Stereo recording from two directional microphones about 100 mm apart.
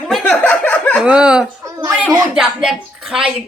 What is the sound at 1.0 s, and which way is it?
A woman's voice, 10° right (ahead or behind).